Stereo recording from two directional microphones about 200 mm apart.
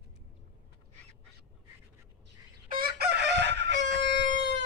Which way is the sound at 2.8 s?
60° right (ahead or behind).